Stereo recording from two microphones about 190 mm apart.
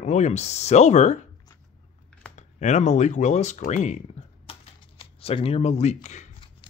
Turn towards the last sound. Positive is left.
turn(degrees=35)  # may be behind; listen again after turning